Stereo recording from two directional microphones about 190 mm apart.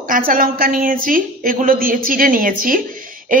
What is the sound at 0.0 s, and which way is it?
A woman's voice, 45° right (ahead or behind).